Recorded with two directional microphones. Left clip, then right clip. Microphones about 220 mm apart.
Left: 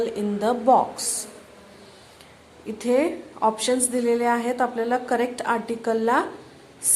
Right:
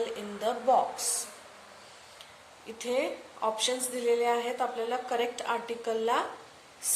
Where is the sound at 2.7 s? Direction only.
15° left (ahead or behind).